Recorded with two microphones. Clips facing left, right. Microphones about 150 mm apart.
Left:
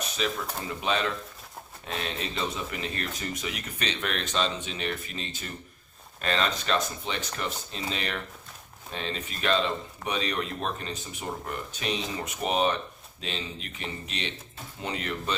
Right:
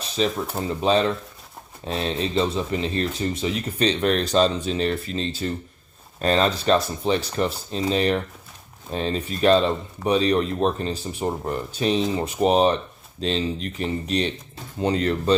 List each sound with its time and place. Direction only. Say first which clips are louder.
0.2 s speech: right 8 dB; 35° right (ahead or behind)